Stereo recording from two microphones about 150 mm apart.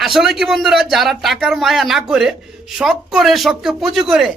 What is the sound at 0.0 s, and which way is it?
Speech, centre (ahead or behind).